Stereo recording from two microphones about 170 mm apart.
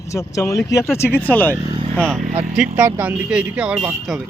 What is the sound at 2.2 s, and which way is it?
Speech, 50° right (ahead or behind).